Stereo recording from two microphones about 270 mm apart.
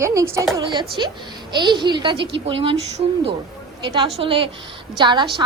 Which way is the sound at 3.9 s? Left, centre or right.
Centre.